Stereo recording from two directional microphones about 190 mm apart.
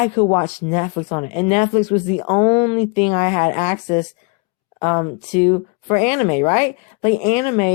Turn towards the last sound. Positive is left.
turn(degrees=35)  # may be behind; listen again after turning